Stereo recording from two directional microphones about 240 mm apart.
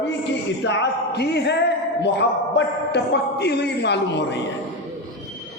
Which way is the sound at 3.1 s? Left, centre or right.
Left.